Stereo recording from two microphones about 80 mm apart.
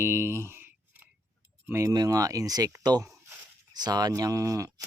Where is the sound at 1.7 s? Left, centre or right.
Right.